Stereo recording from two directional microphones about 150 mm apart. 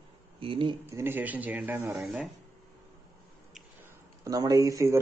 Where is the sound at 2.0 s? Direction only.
Centre (ahead or behind).